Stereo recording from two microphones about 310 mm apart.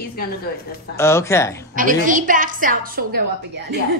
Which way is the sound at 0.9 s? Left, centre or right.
Centre.